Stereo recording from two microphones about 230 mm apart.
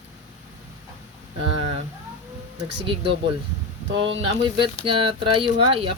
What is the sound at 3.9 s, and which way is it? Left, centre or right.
Speech, right.